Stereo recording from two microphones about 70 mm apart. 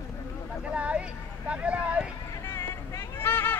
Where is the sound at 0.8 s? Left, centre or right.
Centre.